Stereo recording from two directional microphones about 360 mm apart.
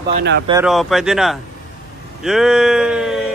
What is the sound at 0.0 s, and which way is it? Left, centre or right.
Speech, right.